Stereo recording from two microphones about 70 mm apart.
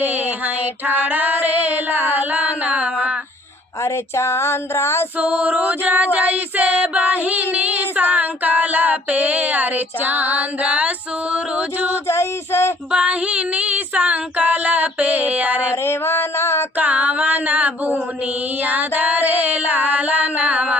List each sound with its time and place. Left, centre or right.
0.0 s female singing: right
3.8 s speech: left
5.1 s female singing: right
12.0 s speech: left
12.9 s female singing: centre
15.7 s mantra: left
16.7 s child singing: right
18.6 s female singing: right